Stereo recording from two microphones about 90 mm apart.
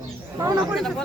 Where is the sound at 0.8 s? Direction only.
5° left (ahead or behind).